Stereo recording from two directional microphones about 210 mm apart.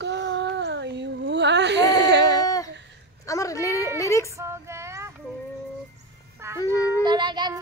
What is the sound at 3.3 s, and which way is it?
A woman's voice, 15° left (ahead or behind).